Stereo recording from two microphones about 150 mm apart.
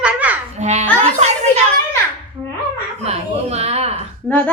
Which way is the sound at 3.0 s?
45° right (ahead or behind).